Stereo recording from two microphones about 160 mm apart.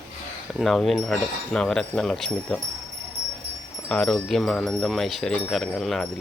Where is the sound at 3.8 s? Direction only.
5° left (ahead or behind).